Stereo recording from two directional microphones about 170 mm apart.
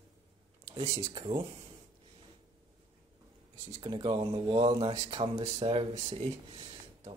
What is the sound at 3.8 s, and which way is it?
Speech, 30° right (ahead or behind).